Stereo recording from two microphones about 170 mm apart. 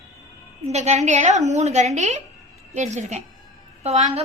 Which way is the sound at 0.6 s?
40° right (ahead or behind).